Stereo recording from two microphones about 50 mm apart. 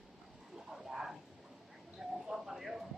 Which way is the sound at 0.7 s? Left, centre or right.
Centre.